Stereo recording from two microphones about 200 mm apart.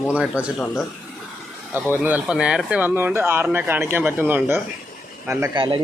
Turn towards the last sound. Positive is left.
turn(degrees=-15)  # may be behind; listen again after turning